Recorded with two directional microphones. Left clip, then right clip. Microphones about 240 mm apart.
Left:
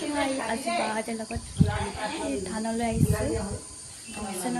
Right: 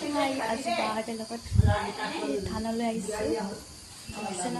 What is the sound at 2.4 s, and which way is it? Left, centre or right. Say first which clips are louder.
Speech: left 2 dB; centre.